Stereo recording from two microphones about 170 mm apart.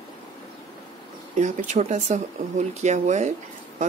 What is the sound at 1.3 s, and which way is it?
Speech, 45° right (ahead or behind).